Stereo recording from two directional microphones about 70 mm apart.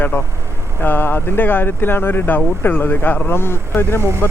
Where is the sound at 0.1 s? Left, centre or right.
Left.